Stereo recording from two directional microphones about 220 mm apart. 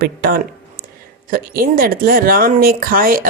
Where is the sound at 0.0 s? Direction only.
45° right (ahead or behind).